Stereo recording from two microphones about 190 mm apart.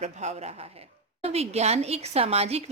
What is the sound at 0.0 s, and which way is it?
A woman's voice, 35° right (ahead or behind).